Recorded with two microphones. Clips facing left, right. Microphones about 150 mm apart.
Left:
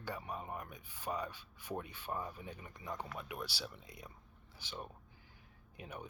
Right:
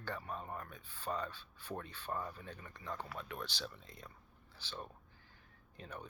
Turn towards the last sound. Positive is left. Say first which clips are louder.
# left 1 dB
turn(degrees=15)  # may be behind; listen again after turning